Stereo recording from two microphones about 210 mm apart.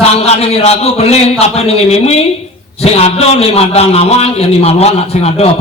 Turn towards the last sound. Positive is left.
turn(degrees=30)  # may be behind; listen again after turning